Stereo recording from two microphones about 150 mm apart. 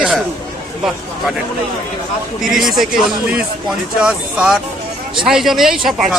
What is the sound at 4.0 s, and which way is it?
Speech, 5° right (ahead or behind).